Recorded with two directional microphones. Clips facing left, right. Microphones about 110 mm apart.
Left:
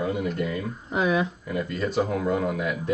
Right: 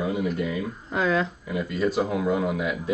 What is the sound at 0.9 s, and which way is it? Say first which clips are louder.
Speech: even; 15° left (ahead or behind).